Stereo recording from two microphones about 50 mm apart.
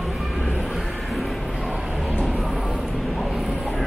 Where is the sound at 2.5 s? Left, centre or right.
Centre.